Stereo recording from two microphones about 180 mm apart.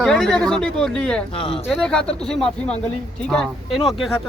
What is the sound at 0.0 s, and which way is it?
Speech, 5° left (ahead or behind).